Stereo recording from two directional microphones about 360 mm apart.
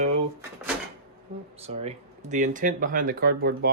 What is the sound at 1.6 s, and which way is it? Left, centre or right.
Speech, centre.